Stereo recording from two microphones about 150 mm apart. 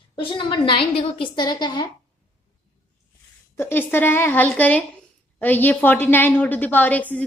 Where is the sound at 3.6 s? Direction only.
15° left (ahead or behind).